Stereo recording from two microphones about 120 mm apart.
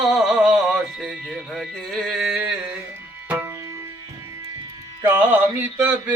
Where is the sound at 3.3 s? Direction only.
15° right (ahead or behind).